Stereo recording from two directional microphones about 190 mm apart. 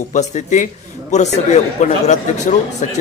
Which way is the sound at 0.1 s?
40° left (ahead or behind).